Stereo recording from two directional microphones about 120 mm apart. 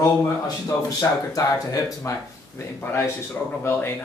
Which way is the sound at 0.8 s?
30° left (ahead or behind).